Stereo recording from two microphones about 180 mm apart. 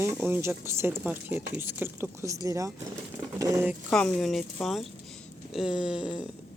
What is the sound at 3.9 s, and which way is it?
Speech, centre (ahead or behind).